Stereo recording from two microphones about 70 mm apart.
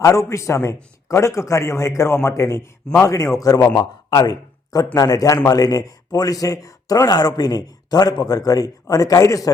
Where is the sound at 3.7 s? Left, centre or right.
Left.